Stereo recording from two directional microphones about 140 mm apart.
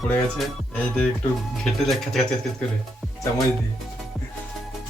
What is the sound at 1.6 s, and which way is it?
Speech, centre (ahead or behind).